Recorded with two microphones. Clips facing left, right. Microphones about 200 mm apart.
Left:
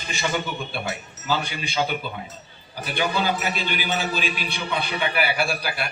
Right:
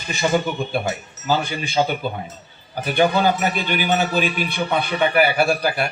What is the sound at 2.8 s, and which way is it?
A man's voice, 50° right (ahead or behind).